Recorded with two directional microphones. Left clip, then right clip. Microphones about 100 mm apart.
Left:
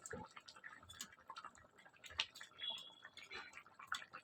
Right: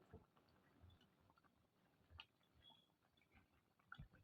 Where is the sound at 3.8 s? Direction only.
25° left (ahead or behind).